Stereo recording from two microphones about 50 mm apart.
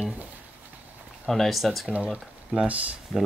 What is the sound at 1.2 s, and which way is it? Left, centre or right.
Speech, centre.